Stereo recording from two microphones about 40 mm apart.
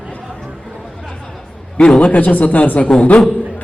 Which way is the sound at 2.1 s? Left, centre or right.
Left.